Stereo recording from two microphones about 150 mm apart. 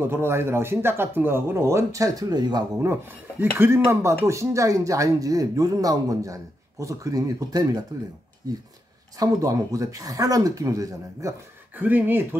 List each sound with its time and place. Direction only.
0.0 s speech: 15° right (ahead or behind)
2.8 s speech: 15° right (ahead or behind)
9.2 s speech: 25° right (ahead or behind)